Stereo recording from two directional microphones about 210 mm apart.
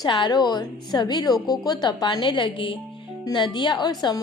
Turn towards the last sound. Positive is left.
turn(degrees=20)  # may be behind; listen again after turning